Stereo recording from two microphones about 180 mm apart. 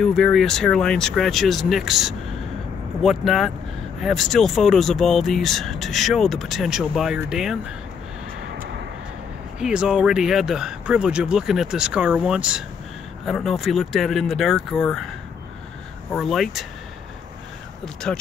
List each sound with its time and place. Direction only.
0.0 s speech: centre (ahead or behind)
9.6 s speech: 5° right (ahead or behind)
16.1 s speech: centre (ahead or behind)
18.1 s speech: 5° left (ahead or behind)